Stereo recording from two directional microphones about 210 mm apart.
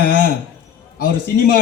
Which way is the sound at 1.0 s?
45° left (ahead or behind).